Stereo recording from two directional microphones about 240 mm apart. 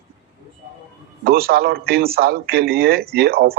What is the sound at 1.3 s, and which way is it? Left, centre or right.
A man's voice, right.